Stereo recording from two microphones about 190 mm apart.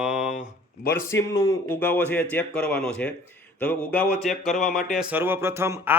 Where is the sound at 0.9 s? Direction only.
15° left (ahead or behind).